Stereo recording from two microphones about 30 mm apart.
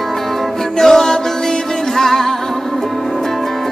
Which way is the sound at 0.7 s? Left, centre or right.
Centre.